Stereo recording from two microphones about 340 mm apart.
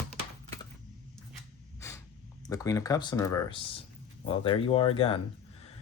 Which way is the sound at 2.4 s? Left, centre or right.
Centre.